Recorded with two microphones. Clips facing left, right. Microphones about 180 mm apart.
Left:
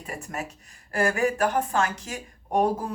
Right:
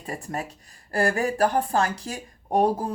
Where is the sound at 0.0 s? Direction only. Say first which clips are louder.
Right 2 dB; 30° right (ahead or behind).